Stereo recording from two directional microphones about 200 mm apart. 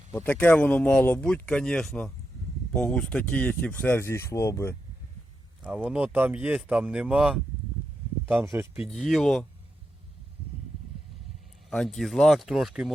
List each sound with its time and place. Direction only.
0.1 s speech: 10° left (ahead or behind)
5.6 s speech: 5° right (ahead or behind)
8.9 s speech: centre (ahead or behind)
11.7 s speech: centre (ahead or behind)